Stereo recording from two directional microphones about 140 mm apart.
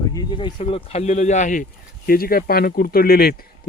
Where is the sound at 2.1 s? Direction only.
90° left.